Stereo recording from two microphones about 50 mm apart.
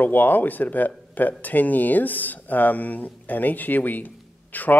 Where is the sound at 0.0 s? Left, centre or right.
Left.